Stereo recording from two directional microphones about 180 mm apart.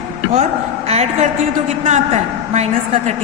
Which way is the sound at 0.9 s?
40° right (ahead or behind).